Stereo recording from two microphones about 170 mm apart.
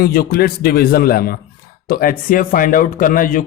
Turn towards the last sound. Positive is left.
turn(degrees=55)  # may be behind; listen again after turning